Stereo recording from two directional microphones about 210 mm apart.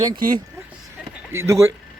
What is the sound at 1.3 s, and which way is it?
Speech, 15° right (ahead or behind).